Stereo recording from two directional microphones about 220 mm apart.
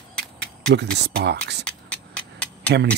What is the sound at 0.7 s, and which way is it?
Speech, 50° right (ahead or behind).